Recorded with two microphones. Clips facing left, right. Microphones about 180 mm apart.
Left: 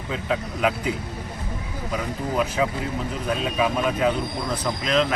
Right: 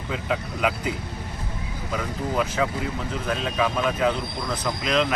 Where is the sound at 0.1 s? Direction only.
5° right (ahead or behind).